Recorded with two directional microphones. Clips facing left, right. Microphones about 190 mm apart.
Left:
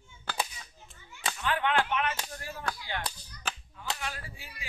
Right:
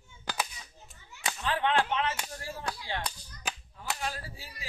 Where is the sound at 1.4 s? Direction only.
30° right (ahead or behind).